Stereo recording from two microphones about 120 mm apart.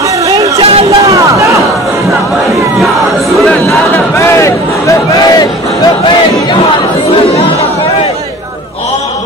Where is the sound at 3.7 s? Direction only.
25° left (ahead or behind).